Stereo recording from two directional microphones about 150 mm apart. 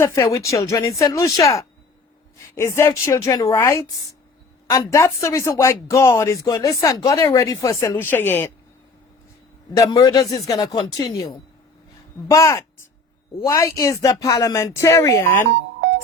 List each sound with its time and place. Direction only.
0.0 s speech: 20° left (ahead or behind)
9.7 s speech: 25° left (ahead or behind)